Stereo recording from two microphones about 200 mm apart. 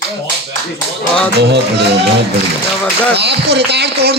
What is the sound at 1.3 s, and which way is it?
Speech, 55° right (ahead or behind).